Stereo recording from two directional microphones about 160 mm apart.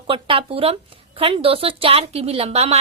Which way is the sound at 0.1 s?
35° right (ahead or behind).